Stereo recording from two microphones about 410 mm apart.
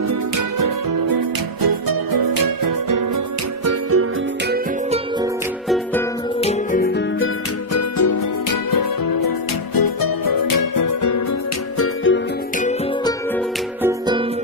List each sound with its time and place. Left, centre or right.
0.6 s music: right
3.6 s music: right
6.4 s music: left
7.7 s music: left
11.8 s music: left
13.8 s music: centre